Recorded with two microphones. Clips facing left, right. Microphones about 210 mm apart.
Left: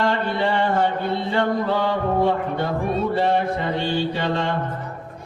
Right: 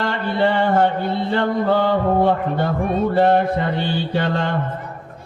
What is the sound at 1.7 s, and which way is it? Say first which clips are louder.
Speech: right 4 dB; 55° right (ahead or behind).